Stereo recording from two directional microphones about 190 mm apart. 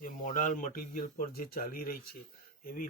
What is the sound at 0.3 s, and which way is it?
Speech, 45° left (ahead or behind).